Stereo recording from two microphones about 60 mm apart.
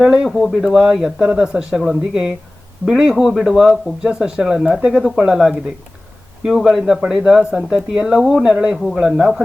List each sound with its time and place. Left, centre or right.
0.0 s speech: centre
0.3 s speech: centre
0.6 s speech: centre
2.8 s speech: centre
8.7 s speech: centre
9.0 s speech: centre